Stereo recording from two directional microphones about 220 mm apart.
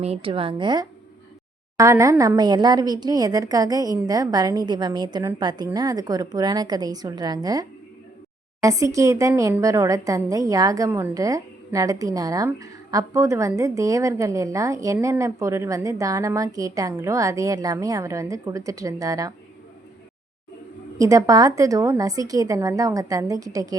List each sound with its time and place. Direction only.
0.0 s a woman's voice: 25° right (ahead or behind)
21.0 s a woman's voice: 15° right (ahead or behind)